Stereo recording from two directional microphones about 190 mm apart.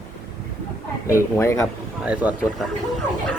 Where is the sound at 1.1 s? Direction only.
15° left (ahead or behind).